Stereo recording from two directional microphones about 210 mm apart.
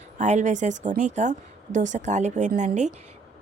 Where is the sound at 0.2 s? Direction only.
35° right (ahead or behind).